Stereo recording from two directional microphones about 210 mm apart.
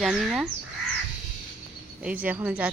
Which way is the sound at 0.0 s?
Centre (ahead or behind).